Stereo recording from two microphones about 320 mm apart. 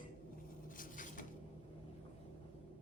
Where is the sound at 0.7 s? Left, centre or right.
Left.